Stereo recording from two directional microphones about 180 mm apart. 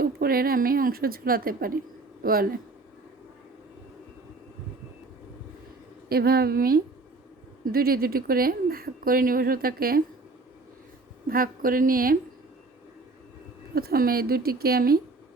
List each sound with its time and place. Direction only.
0.0 s speech: 55° right (ahead or behind)
6.1 s speech: 60° right (ahead or behind)
11.3 s a woman's voice: 50° right (ahead or behind)
13.7 s speech: 55° right (ahead or behind)